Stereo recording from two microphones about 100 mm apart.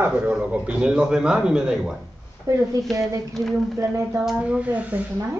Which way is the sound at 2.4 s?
30° right (ahead or behind).